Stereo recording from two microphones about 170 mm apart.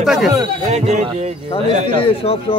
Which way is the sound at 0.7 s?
40° right (ahead or behind).